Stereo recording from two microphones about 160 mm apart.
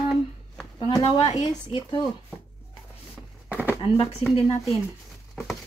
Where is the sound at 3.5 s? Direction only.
10° right (ahead or behind).